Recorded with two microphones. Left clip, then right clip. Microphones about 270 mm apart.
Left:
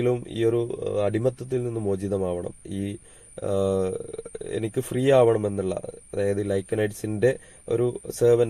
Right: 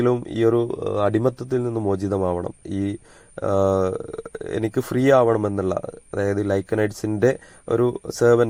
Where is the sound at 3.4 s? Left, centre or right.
Centre.